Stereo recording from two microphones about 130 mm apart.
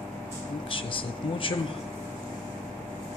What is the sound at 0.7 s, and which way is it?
Speech, 40° left (ahead or behind).